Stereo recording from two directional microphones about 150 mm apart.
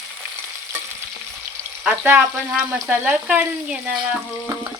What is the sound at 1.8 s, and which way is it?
Speech, 10° right (ahead or behind).